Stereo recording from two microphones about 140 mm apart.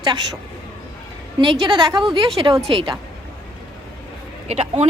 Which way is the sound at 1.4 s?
35° right (ahead or behind).